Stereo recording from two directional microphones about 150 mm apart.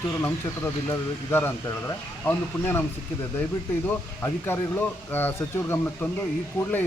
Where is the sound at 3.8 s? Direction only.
15° left (ahead or behind).